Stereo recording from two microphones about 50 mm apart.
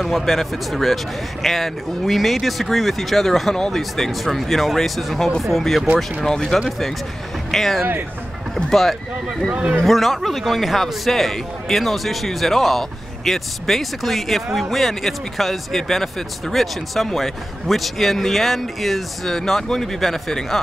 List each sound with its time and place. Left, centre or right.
0.0 s a man's voice: centre
9.5 s a man's voice: right
9.8 s a man's voice: centre